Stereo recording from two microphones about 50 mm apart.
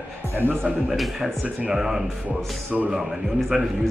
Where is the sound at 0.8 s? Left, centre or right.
Centre.